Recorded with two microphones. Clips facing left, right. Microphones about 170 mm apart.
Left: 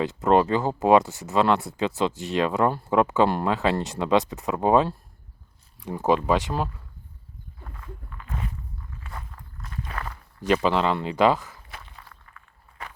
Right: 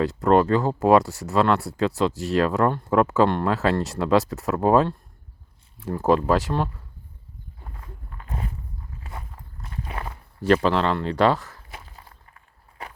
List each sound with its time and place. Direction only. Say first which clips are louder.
0.5 s speech: right 1 dB; centre (ahead or behind)
7.6 s a sound: left 2 dB; 30° right (ahead or behind)
9.0 s walk: right 1 dB; 25° right (ahead or behind)
10.4 s speech: right 2 dB; 5° left (ahead or behind)
11.9 s walk: even; 30° right (ahead or behind)